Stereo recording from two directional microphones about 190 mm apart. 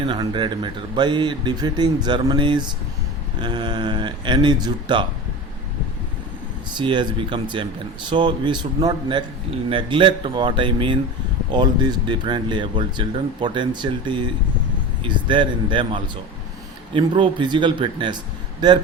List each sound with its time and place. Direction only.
0.0 s speech: 25° right (ahead or behind)
6.7 s speech: 25° right (ahead or behind)